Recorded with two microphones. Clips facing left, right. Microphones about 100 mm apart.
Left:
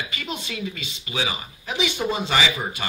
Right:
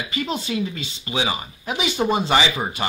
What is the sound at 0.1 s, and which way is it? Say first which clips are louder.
A man's voice: right 7 dB; 30° right (ahead or behind).